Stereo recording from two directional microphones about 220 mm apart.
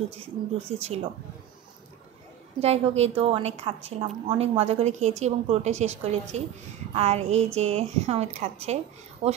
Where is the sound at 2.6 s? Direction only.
30° right (ahead or behind).